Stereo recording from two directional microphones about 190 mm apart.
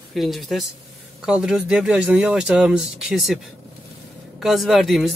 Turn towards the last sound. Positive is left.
turn(degrees=0)  # may be behind; listen again after turning